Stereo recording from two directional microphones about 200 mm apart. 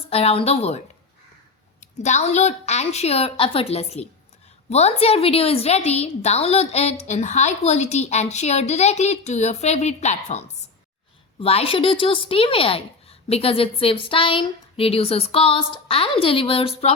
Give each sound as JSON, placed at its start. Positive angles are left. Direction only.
{"t": 0.0, "sound": "speech", "side_deg": 30}
{"t": 1.8, "sound": "a woman's voice", "side_deg": 35}